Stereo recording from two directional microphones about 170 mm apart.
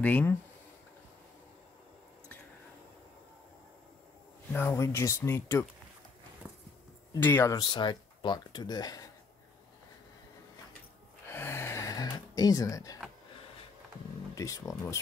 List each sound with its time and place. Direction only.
0.0 s speech: 10° left (ahead or behind)
4.5 s speech: 10° left (ahead or behind)
6.4 s a sound: 10° right (ahead or behind)
7.2 s speech: 10° left (ahead or behind)
11.2 s a sound: 15° left (ahead or behind)
14.3 s speech: 20° left (ahead or behind)